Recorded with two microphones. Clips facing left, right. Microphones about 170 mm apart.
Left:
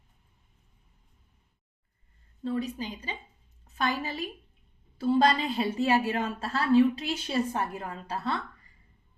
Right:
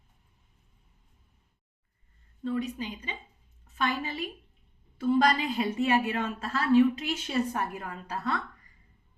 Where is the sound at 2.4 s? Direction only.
35° left (ahead or behind).